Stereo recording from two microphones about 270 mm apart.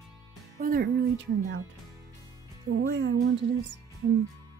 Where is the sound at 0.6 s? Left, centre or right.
Right.